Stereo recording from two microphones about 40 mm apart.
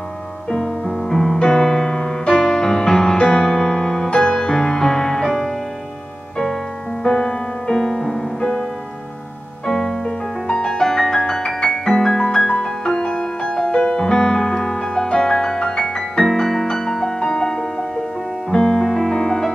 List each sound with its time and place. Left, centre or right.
0.5 s music: centre
4.1 s music: left
5.3 s music: centre
7.1 s music: left
7.7 s music: centre
8.4 s music: left
9.7 s music: centre